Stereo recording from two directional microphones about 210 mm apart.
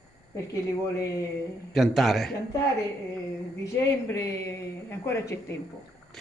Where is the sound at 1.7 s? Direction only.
Centre (ahead or behind).